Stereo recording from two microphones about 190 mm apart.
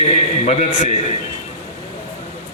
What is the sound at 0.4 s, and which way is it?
Speech, 35° left (ahead or behind).